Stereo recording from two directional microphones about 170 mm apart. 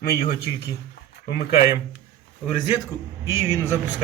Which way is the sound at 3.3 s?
15° right (ahead or behind).